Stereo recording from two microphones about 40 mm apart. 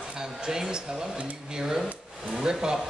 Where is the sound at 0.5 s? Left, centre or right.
Centre.